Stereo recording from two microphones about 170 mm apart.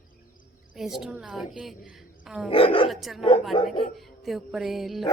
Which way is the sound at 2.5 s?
30° left (ahead or behind).